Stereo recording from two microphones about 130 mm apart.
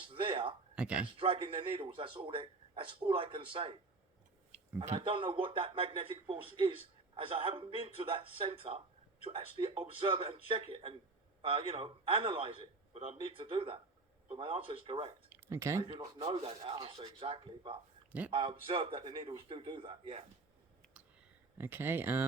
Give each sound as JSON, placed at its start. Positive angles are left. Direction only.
{"t": 0.0, "sound": "speech", "side_deg": -40}
{"t": 0.8, "sound": "speech", "side_deg": -10}
{"t": 1.1, "sound": "a man's voice", "side_deg": -45}
{"t": 4.9, "sound": "a man's voice", "side_deg": -40}
{"t": 15.4, "sound": "speech", "side_deg": -20}
{"t": 15.8, "sound": "speech", "side_deg": -35}
{"t": 21.6, "sound": "speech", "side_deg": -15}